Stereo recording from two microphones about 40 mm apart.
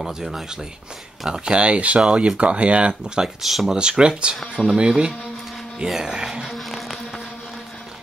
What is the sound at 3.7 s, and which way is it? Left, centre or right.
Speech, right.